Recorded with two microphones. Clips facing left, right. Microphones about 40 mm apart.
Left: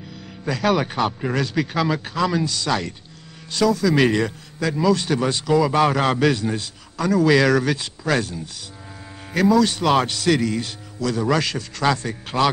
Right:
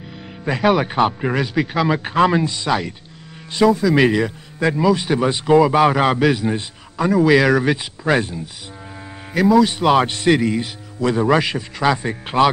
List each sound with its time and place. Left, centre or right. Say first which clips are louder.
0.5 s a man's voice: right 4 dB; centre
2.0 s a man's voice: right 6 dB; right
3.8 s speech: right 2 dB; centre
4.6 s a man's voice: right 3 dB; right
9.3 s a man's voice: right 3 dB; centre; by 12.4 s right